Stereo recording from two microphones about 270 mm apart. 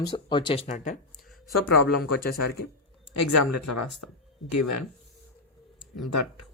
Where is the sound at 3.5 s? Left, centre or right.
Left.